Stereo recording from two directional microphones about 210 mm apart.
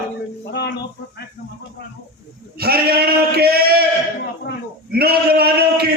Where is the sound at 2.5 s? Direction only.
45° right (ahead or behind).